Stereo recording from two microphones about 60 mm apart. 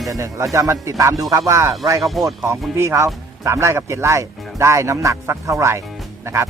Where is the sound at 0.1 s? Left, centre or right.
Right.